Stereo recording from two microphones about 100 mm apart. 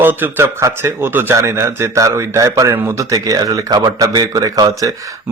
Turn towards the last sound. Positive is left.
turn(degrees=-40)  # may be behind; listen again after turning